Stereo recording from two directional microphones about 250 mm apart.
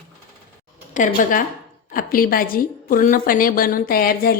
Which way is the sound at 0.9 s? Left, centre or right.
Left.